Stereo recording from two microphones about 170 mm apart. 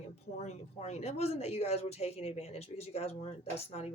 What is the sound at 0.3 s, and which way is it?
Speech, 40° left (ahead or behind).